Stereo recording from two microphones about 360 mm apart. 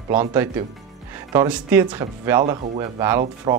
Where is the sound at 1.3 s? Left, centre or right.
Centre.